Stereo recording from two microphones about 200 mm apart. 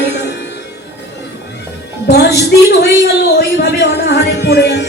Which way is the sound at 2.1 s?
55° left (ahead or behind).